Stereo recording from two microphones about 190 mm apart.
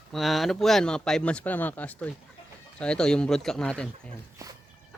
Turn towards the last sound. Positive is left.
turn(degrees=-15)  # may be behind; listen again after turning